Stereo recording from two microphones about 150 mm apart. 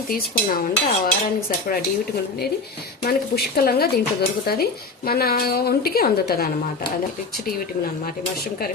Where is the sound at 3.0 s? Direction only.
85° left.